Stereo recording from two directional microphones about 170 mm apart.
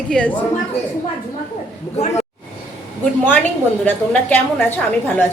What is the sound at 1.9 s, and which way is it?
Speech, 40° left (ahead or behind).